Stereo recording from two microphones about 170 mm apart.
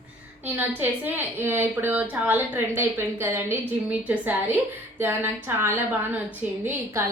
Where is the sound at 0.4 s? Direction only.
10° right (ahead or behind).